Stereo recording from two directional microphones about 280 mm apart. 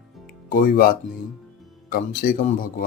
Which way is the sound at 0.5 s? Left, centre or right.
Left.